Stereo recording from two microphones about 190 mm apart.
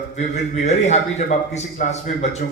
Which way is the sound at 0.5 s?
35° left (ahead or behind).